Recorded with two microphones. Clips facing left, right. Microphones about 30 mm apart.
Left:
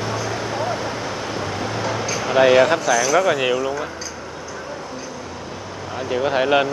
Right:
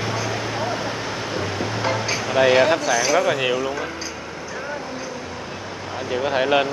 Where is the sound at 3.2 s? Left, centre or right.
Centre.